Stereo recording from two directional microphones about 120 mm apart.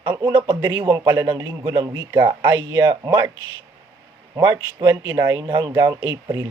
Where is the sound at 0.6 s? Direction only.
20° right (ahead or behind).